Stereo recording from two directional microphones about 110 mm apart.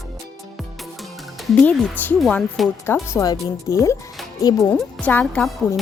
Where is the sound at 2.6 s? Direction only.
Centre (ahead or behind).